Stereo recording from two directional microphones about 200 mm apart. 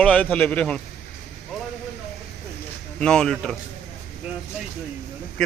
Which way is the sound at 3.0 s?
5° left (ahead or behind).